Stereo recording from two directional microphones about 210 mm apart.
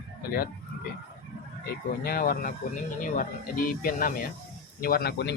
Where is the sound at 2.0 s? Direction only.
45° left (ahead or behind).